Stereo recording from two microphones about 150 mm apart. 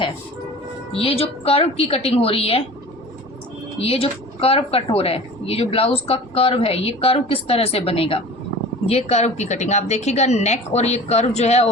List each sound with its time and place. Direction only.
0.9 s speech: 40° left (ahead or behind)
3.8 s a woman's voice: 40° left (ahead or behind)